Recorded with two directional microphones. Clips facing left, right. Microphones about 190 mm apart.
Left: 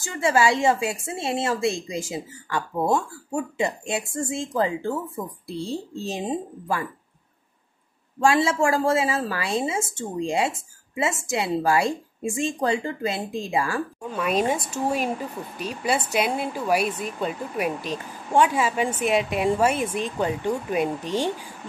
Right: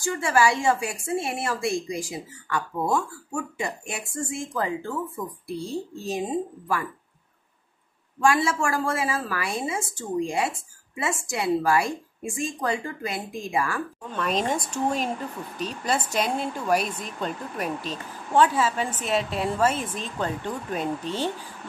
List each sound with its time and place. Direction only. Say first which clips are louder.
0.0 s a woman's voice: left 1 dB; 20° left (ahead or behind)
8.2 s a woman's voice: left 2 dB; 25° left (ahead or behind)
14.1 s speech: left 3 dB; 10° left (ahead or behind)